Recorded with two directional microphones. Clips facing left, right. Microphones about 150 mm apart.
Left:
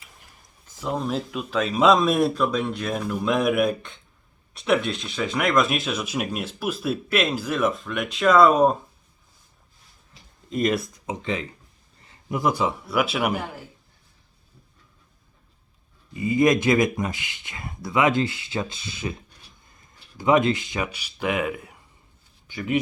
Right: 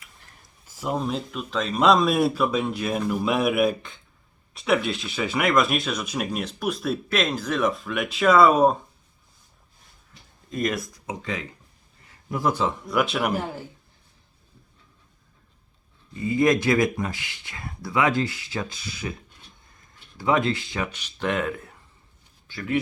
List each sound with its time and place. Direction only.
0.8 s speech: 5° right (ahead or behind)
10.5 s a man's voice: 25° left (ahead or behind); by 13.4 s 5° left (ahead or behind)
16.1 s speech: 15° left (ahead or behind)
20.1 s speech: 20° left (ahead or behind)